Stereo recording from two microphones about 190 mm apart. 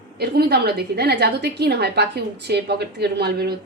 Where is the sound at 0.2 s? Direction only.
55° right (ahead or behind).